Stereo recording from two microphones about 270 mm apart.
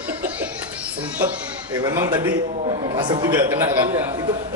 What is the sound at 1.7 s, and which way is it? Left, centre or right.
Speech, centre.